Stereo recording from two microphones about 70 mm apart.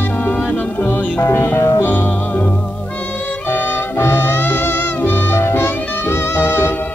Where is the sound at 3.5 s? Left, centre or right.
Left.